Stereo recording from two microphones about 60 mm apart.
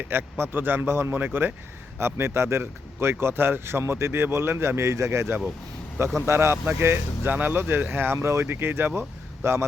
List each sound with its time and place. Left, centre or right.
0.0 s speech: right
2.0 s speech: right